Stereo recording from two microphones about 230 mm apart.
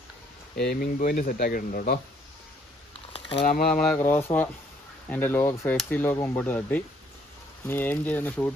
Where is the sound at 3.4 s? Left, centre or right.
Left.